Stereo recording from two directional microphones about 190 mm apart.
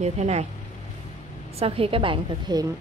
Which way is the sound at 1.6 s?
30° right (ahead or behind).